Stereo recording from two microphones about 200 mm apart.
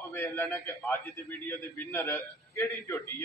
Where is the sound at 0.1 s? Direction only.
10° left (ahead or behind).